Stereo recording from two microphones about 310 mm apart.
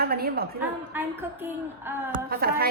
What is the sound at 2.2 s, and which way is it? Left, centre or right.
Speech, right.